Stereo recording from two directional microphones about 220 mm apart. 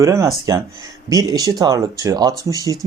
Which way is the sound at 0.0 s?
15° right (ahead or behind).